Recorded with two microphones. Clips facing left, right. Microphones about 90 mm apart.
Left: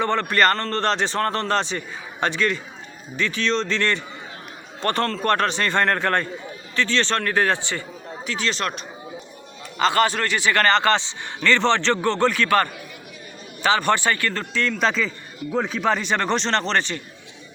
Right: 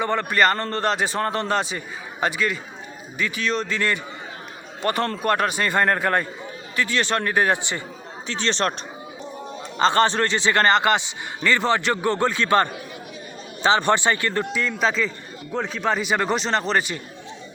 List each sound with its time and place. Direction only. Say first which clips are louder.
0.0 s a man's voice: left 1 dB; 5° right (ahead or behind)
8.3 s speech: right 2 dB; 35° right (ahead or behind)
9.7 s a man's voice: right 1 dB; 30° right (ahead or behind); by 17.0 s 10° right (ahead or behind)